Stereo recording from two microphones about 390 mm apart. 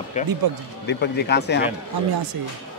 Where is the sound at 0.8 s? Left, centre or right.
Left.